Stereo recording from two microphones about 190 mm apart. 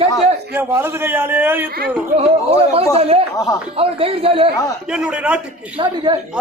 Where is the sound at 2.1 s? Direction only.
30° right (ahead or behind).